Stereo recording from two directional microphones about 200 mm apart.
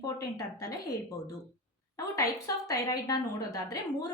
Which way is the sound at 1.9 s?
15° left (ahead or behind).